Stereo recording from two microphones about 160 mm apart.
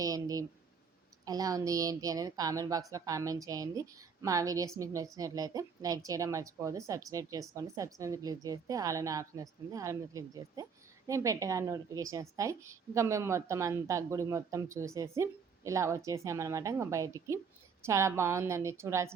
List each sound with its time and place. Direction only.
0.0 s a woman's voice: 20° right (ahead or behind)